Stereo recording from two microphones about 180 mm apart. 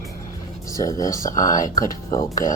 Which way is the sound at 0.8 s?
20° left (ahead or behind).